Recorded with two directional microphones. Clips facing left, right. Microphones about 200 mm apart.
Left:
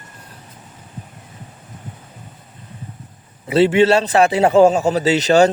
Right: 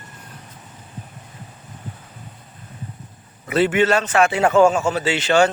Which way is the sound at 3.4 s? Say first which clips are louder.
Left 4 dB; 30° left (ahead or behind).